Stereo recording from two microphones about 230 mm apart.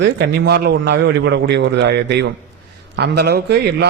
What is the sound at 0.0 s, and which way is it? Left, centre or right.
A man's voice, right.